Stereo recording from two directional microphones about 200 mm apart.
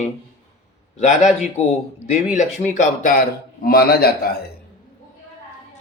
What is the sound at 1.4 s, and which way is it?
A man's voice, 35° left (ahead or behind).